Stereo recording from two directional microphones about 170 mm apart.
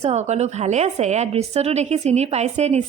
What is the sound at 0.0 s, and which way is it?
A woman's voice, 40° right (ahead or behind).